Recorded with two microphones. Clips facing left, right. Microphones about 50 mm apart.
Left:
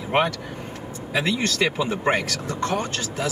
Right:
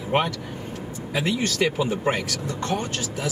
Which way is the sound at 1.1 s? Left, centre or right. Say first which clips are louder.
Left 1 dB; left.